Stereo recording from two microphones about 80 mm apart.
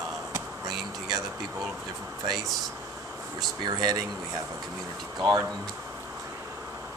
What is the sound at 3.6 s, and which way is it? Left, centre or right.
Speech, right.